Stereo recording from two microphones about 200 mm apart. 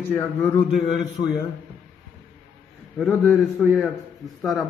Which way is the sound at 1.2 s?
40° left (ahead or behind).